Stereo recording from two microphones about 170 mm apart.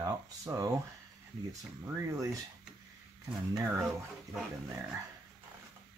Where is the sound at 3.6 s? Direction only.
5° right (ahead or behind).